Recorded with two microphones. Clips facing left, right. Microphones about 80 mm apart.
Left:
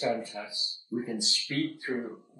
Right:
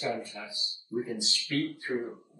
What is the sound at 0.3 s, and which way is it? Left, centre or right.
Speech, left.